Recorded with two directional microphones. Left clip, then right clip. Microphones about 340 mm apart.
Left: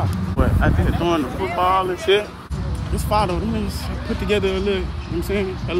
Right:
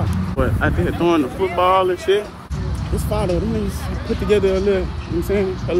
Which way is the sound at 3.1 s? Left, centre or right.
Centre.